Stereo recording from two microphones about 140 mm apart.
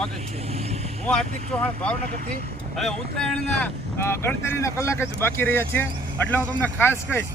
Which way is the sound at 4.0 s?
15° left (ahead or behind).